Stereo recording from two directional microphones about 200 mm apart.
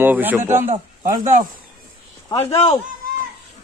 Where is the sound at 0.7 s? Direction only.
40° right (ahead or behind).